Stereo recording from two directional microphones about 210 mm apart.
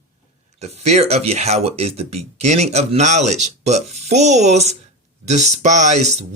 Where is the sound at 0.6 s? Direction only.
30° right (ahead or behind).